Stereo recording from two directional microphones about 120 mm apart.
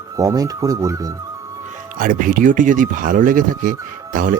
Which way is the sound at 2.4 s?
90° right.